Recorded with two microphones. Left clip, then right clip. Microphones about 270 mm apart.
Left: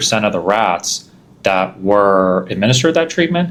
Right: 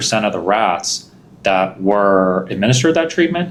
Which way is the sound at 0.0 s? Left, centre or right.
Left.